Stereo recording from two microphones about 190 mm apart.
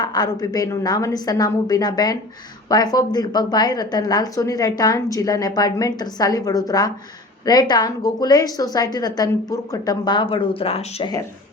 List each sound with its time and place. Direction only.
0.0 s a woman's voice: 20° left (ahead or behind)